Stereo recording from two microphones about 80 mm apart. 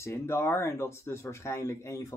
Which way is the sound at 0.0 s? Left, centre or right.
Left.